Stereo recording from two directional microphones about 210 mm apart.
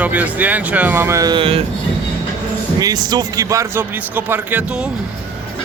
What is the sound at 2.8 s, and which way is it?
Speech, 20° right (ahead or behind).